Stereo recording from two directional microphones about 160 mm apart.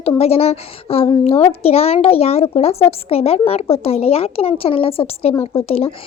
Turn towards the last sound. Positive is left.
turn(degrees=35)  # may be behind; listen again after turning